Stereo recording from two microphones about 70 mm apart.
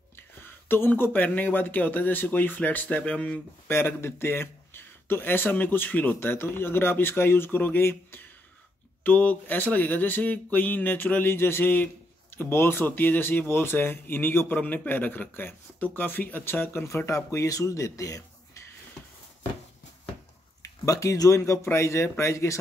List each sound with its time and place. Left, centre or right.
0.1 s speech: left
3.6 s speech: left
20.8 s speech: left